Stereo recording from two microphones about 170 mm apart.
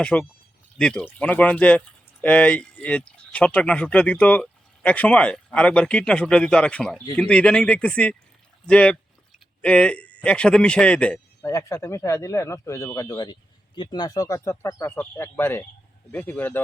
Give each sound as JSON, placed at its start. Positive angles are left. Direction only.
{"t": 0.0, "sound": "speech", "side_deg": 5}
{"t": 11.5, "sound": "speech", "side_deg": 15}